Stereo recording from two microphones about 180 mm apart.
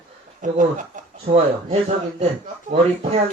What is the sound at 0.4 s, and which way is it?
Speech, 45° right (ahead or behind).